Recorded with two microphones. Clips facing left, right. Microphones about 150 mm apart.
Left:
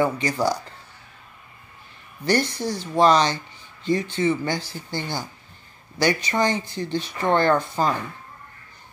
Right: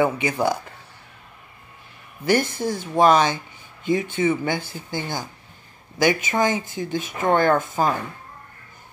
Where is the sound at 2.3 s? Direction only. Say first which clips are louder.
Right 1 dB; 50° right (ahead or behind).